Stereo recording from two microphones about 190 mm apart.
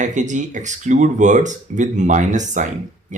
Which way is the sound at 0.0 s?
40° right (ahead or behind).